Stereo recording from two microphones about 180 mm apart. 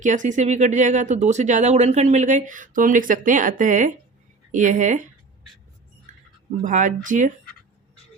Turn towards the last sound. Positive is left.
turn(degrees=-45)  # may be behind; listen again after turning